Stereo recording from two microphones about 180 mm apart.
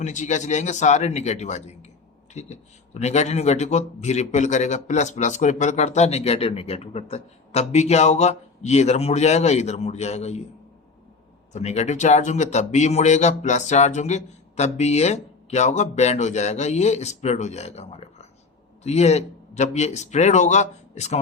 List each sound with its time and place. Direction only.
0.0 s speech: 45° left (ahead or behind)
11.5 s speech: 40° left (ahead or behind)